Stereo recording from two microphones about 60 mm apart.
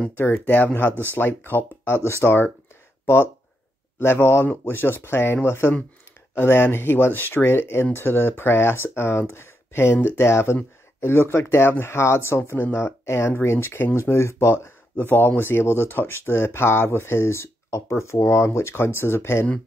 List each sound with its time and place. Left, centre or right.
0.1 s speech: left
2.0 s speech: left
4.0 s speech: left
15.0 s speech: left